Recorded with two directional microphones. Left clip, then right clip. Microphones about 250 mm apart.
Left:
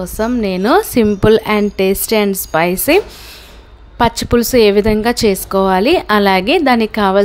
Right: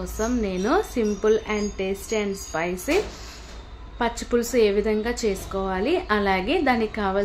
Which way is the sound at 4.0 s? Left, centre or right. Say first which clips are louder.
Left 11 dB; left.